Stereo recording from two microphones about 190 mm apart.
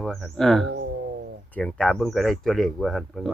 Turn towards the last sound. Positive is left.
turn(degrees=0)  # may be behind; listen again after turning